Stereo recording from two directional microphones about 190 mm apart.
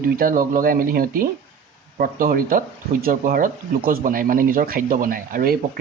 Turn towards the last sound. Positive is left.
turn(degrees=-50)  # may be behind; listen again after turning